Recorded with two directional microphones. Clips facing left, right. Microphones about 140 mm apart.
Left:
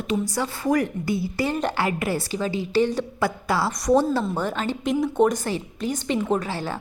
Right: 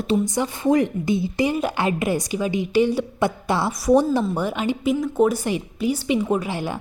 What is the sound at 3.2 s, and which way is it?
A woman's voice, 20° right (ahead or behind).